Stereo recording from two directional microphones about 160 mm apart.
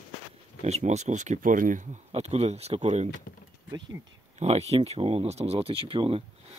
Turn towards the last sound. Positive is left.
turn(degrees=-35)  # may be behind; listen again after turning